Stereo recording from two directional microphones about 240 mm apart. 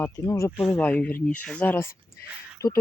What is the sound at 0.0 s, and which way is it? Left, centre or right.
Speech, centre.